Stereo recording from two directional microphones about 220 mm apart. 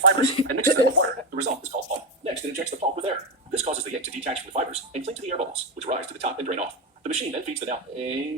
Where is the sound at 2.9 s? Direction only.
25° right (ahead or behind).